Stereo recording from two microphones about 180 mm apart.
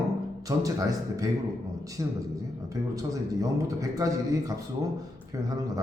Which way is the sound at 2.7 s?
20° right (ahead or behind).